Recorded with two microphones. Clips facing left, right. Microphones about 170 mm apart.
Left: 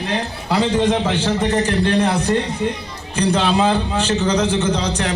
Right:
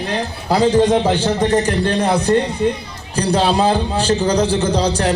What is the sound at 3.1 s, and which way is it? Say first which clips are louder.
A man's voice: right 1 dB; 35° right (ahead or behind).